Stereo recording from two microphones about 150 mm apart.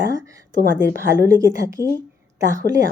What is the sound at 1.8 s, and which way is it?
Speech, 20° left (ahead or behind).